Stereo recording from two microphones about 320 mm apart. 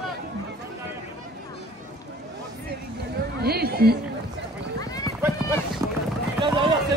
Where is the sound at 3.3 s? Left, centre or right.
Right.